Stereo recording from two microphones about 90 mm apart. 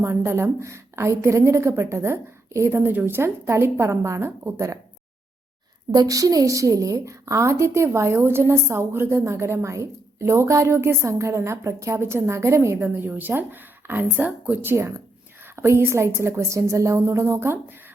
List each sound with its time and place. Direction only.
0.0 s a woman's voice: 30° right (ahead or behind)
5.9 s a woman's voice: 45° right (ahead or behind); by 17.7 s 25° right (ahead or behind)